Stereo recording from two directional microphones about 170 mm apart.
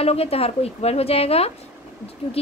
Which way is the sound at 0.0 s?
35° left (ahead or behind).